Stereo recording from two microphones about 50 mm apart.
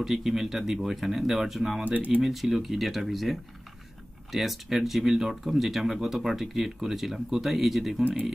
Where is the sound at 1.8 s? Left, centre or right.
Right.